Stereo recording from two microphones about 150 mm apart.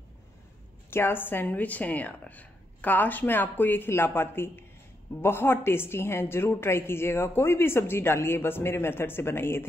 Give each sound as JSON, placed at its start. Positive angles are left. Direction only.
{"t": 0.8, "sound": "a woman's voice", "side_deg": 15}